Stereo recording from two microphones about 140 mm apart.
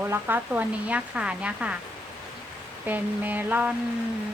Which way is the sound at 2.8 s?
15° right (ahead or behind).